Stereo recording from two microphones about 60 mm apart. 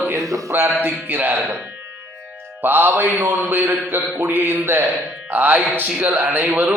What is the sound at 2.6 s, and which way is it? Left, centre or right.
Speech, right.